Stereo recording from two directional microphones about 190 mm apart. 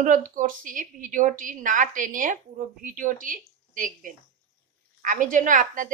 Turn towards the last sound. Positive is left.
turn(degrees=-45)  # may be behind; listen again after turning